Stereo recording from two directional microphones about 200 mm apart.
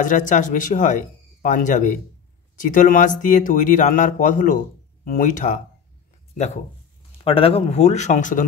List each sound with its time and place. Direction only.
0.0 s speech: 40° left (ahead or behind)